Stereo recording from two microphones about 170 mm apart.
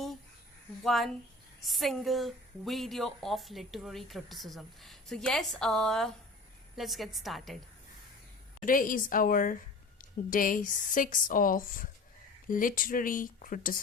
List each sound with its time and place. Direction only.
0.9 s a woman's voice: centre (ahead or behind)
8.6 s a woman's voice: 55° left (ahead or behind)